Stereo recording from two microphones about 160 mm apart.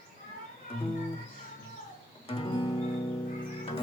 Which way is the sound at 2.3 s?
30° left (ahead or behind).